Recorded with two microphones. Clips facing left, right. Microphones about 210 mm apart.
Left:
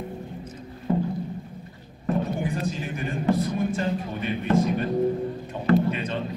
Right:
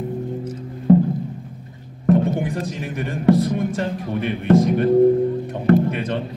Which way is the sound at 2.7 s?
70° right (ahead or behind).